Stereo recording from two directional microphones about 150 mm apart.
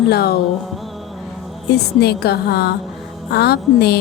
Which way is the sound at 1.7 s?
90° left.